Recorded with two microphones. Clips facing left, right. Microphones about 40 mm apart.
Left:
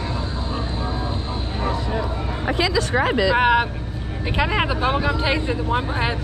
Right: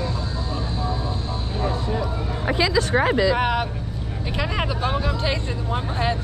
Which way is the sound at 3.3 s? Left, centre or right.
Left.